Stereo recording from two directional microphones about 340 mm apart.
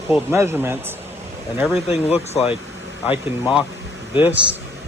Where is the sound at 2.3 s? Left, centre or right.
Centre.